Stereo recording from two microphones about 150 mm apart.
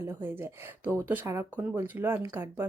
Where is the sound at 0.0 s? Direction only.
15° right (ahead or behind).